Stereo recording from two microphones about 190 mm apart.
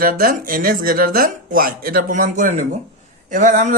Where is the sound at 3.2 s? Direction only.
40° right (ahead or behind).